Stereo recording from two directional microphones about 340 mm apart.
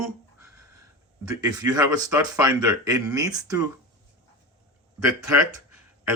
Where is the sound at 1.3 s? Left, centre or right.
Centre.